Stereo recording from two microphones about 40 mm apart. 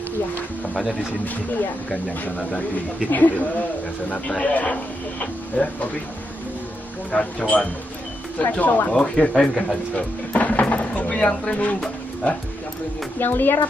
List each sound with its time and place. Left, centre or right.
2.2 s speech: left
7.1 s speech: left
8.4 s speech: left
8.9 s speech: left
9.9 s speech: left
13.2 s speech: left